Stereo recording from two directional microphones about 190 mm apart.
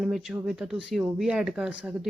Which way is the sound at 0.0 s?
Centre (ahead or behind).